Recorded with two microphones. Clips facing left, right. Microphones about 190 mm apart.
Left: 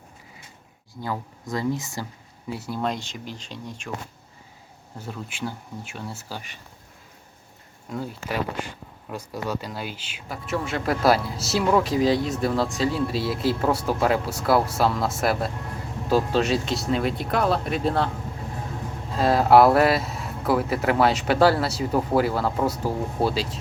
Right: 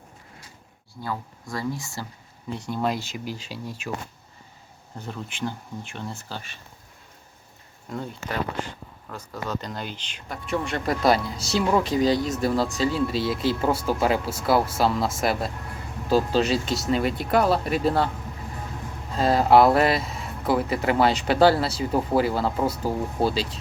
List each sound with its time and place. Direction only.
1.0 s speech: 20° left (ahead or behind)
2.5 s speech: 5° left (ahead or behind)
4.9 s speech: 5° left (ahead or behind)
7.9 s speech: 5° left (ahead or behind)
19.1 s speech: centre (ahead or behind)